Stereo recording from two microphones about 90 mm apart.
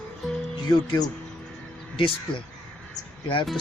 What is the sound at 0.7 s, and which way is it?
Speech, 45° left (ahead or behind).